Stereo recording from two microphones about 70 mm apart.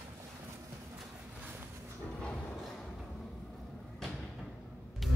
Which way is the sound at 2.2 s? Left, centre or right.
Centre.